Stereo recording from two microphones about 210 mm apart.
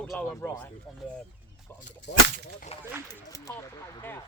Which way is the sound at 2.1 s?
50° left (ahead or behind).